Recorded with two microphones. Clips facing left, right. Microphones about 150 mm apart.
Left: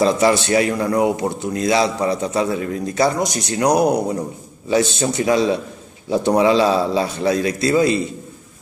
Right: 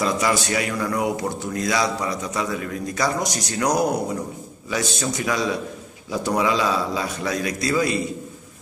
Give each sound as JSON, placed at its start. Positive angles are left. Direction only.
{"t": 0.0, "sound": "a man's voice", "side_deg": 30}